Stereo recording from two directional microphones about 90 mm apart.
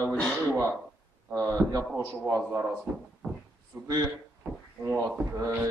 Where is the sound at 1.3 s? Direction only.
30° right (ahead or behind).